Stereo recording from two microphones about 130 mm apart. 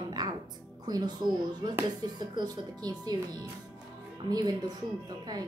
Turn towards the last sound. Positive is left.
turn(degrees=-30)  # may be behind; listen again after turning